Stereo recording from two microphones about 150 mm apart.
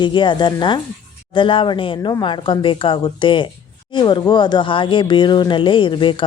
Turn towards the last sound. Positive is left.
turn(degrees=30)  # may be behind; listen again after turning